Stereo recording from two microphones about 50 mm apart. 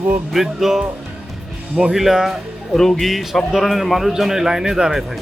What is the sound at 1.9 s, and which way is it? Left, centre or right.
Speech, centre.